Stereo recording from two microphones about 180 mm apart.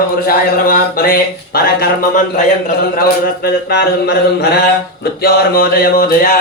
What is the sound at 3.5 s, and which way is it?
Speech, 60° left (ahead or behind).